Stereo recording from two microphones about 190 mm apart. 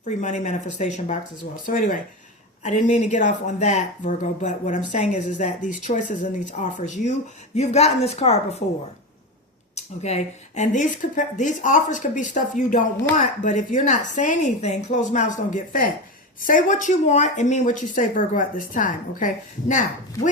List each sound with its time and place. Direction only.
0.0 s a woman's voice: 40° left (ahead or behind)
9.7 s a woman's voice: 35° left (ahead or behind)